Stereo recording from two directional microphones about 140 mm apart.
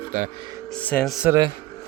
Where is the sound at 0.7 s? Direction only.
10° left (ahead or behind).